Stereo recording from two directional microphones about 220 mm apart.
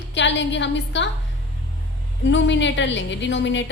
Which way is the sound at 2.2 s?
55° left (ahead or behind).